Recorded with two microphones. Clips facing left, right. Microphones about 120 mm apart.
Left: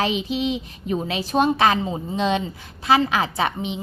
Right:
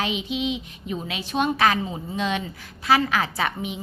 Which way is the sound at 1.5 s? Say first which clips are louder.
Left 2 dB; 25° left (ahead or behind).